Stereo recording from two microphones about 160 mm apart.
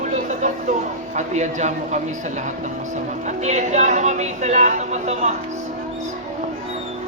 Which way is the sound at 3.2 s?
50° right (ahead or behind).